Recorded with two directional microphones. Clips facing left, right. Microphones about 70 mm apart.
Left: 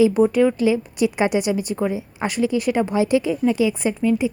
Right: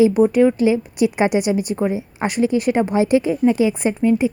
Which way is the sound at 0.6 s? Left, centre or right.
Right.